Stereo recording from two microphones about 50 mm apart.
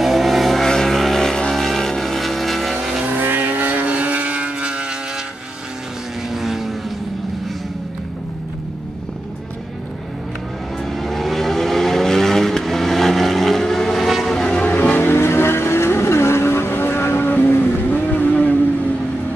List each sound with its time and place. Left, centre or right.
0.0 s vehicle: centre
3.1 s vehicle: right
6.3 s vehicle: centre
10.9 s vehicle: centre
14.3 s music: centre
15.0 s vehicle: left